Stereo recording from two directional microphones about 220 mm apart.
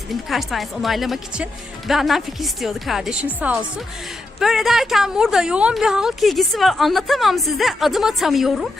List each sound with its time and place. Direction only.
0.1 s speech: centre (ahead or behind)